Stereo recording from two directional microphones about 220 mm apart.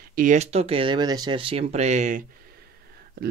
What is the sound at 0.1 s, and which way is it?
Speech, 35° right (ahead or behind).